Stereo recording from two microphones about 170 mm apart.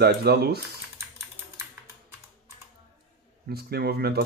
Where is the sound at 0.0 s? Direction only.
70° right (ahead or behind).